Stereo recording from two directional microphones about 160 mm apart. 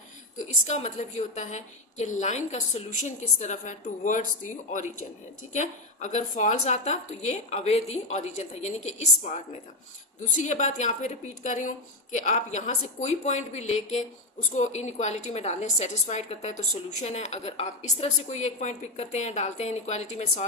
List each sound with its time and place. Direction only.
0.4 s a woman's voice: 45° left (ahead or behind)
5.5 s a woman's voice: 50° left (ahead or behind)